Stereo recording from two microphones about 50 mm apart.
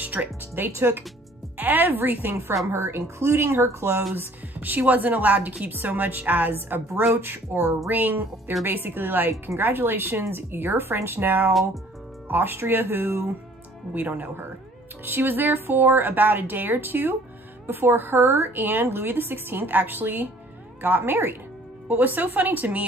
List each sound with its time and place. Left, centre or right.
0.0 s speech: right
0.6 s a woman's voice: right
1.6 s a woman's voice: right
2.7 s speech: right
4.1 s a woman's voice: right
7.2 s a woman's voice: right
7.9 s a woman's voice: right
13.9 s a woman's voice: right